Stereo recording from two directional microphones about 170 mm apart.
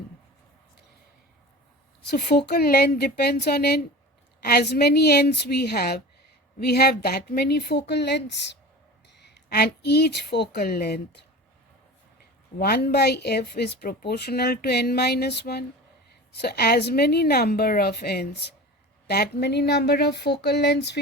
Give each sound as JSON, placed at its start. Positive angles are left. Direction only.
{"t": 2.0, "sound": "speech", "side_deg": 70}
{"t": 9.2, "sound": "speech", "side_deg": 75}
{"t": 12.5, "sound": "speech", "side_deg": 65}